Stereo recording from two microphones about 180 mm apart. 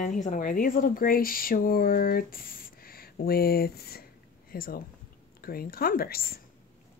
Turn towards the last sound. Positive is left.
turn(degrees=55)  # may be behind; listen again after turning